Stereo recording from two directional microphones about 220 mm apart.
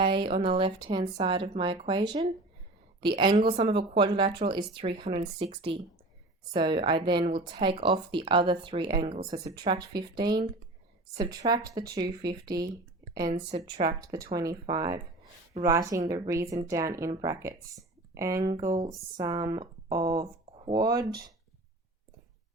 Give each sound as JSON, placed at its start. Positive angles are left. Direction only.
{"t": 0.2, "sound": "speech", "side_deg": -25}
{"t": 9.6, "sound": "speech", "side_deg": -20}
{"t": 21.0, "sound": "speech", "side_deg": -45}